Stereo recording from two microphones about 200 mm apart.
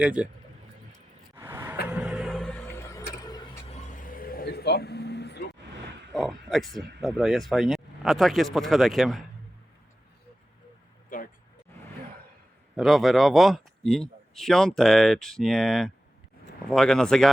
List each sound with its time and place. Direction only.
0.0 s speech: 5° right (ahead or behind)
1.4 s vehicle: 10° right (ahead or behind); by 3.0 s 15° left (ahead or behind)
3.2 s a sound: 20° left (ahead or behind)
3.7 s vehicle: 35° left (ahead or behind); by 5.5 s 60° left (ahead or behind)
6.1 s speech: centre (ahead or behind)
11.1 s a sound: 40° left (ahead or behind)
12.7 s speech: centre (ahead or behind)